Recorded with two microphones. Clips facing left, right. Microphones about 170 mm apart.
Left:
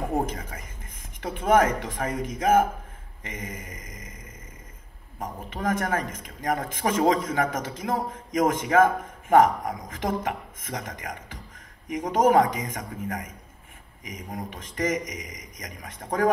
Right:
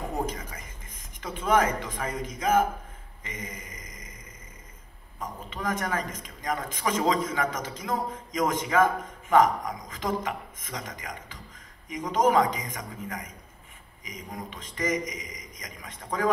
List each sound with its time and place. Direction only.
0.1 s a man's voice: 55° left (ahead or behind)
5.2 s a man's voice: 50° left (ahead or behind)